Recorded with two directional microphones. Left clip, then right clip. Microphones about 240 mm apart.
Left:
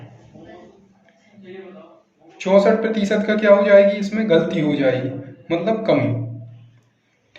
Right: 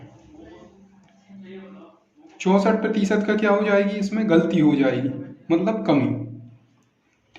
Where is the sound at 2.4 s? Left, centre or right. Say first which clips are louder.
Left 5 dB; right.